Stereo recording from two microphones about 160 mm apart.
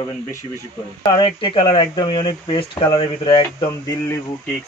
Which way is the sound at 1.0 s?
30° left (ahead or behind).